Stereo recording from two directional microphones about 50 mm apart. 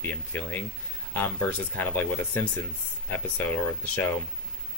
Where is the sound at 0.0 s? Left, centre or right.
Left.